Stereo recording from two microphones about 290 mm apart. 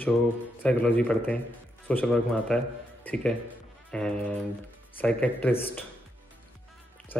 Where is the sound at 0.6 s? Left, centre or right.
Centre.